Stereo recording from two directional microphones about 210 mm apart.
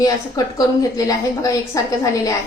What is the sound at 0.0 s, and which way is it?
A woman's voice, 15° left (ahead or behind).